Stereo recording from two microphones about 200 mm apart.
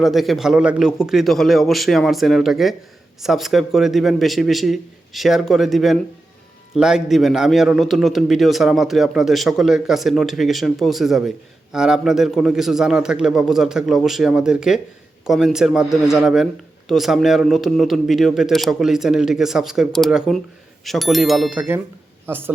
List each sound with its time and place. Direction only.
0.0 s a man's voice: centre (ahead or behind)